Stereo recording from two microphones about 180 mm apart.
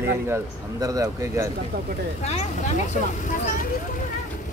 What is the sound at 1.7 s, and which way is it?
Speech, 55° right (ahead or behind).